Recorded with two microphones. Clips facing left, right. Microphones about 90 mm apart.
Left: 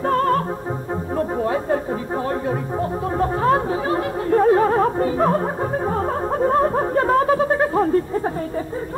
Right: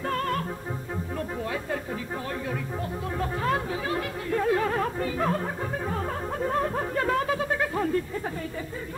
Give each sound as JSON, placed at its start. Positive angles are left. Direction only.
{"t": 0.0, "sound": "music", "side_deg": 35}
{"t": 1.1, "sound": "chatter", "side_deg": 35}